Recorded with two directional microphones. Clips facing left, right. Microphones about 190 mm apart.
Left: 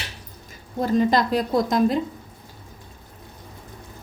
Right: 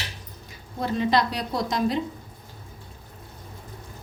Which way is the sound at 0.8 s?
40° left (ahead or behind).